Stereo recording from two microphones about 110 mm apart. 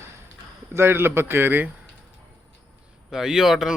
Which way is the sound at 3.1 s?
5° right (ahead or behind).